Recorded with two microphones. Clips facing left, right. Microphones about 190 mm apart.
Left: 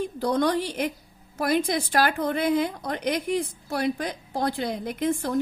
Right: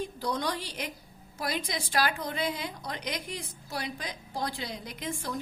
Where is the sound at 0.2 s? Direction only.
55° left (ahead or behind).